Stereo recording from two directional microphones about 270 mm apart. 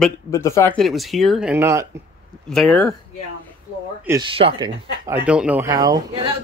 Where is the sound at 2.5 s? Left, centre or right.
Centre.